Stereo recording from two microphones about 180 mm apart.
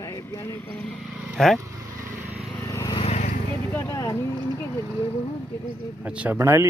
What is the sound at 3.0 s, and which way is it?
Vehicle, 35° left (ahead or behind).